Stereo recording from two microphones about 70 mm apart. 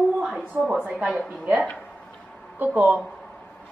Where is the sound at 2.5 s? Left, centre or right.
Right.